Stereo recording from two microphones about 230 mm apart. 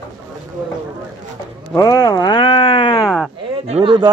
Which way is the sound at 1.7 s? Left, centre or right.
Centre.